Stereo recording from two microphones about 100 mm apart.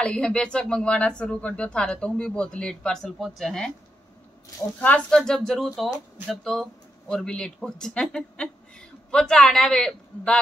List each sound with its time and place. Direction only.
0.0 s speech: 10° left (ahead or behind)
4.7 s speech: 15° left (ahead or behind)
5.1 s speech: 5° left (ahead or behind)